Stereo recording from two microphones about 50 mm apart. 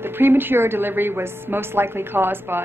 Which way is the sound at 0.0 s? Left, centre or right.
Right.